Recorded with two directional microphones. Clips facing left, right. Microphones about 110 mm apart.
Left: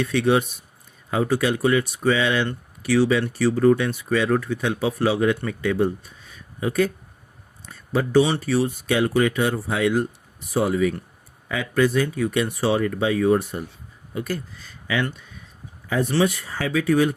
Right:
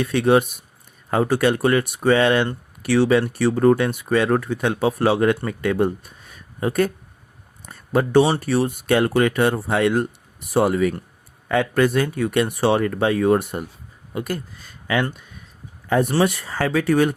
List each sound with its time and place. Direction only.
0.0 s speech: 50° right (ahead or behind)
1.1 s speech: 60° right (ahead or behind)
7.6 s a sound: 55° right (ahead or behind)
8.4 s speech: 60° right (ahead or behind)
14.1 s speech: 45° right (ahead or behind)
16.3 s speech: 90° right; by 17.2 s 70° right (ahead or behind)